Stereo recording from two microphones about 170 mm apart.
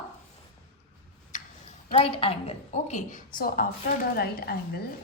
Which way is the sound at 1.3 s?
45° left (ahead or behind).